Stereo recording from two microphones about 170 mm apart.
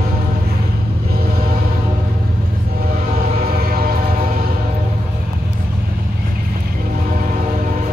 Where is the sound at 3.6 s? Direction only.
60° right (ahead or behind).